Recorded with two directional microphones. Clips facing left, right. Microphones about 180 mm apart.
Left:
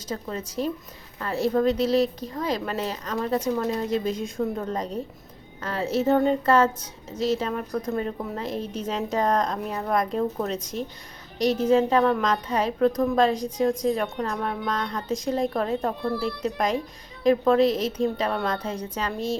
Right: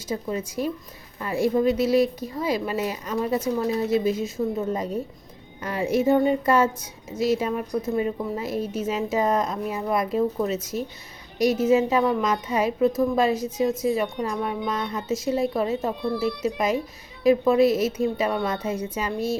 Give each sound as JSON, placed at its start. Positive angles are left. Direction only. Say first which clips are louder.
{"t": 0.1, "sound": "a woman's voice", "louder": "right 3 dB", "side_deg": -10}
{"t": 15.9, "sound": "a woman's voice", "louder": "right 2 dB", "side_deg": -15}